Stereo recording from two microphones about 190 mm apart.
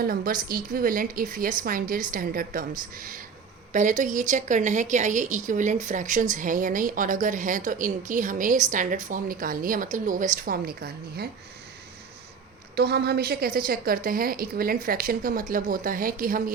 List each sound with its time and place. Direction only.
0.0 s a woman's voice: 50° right (ahead or behind)
12.7 s a woman's voice: 55° right (ahead or behind)